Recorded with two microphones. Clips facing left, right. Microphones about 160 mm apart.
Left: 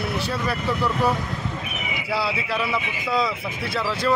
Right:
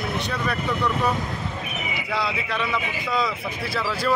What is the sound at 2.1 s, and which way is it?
Speech, 5° left (ahead or behind).